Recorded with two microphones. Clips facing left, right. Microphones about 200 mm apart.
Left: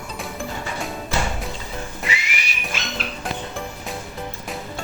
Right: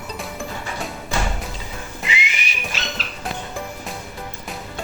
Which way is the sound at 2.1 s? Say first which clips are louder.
Right 1 dB; 20° right (ahead or behind).